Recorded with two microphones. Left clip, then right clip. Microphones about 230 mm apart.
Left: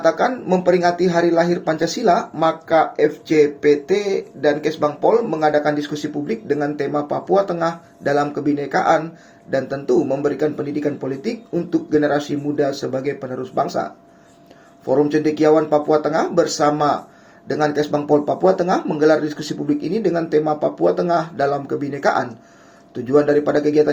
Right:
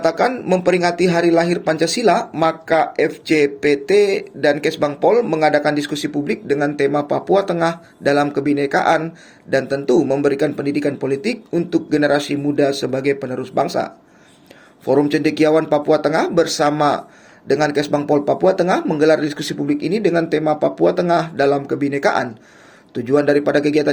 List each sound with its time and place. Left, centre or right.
0.0 s speech: right
14.8 s speech: right